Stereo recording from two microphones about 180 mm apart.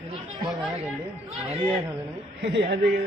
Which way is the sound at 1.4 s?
35° right (ahead or behind).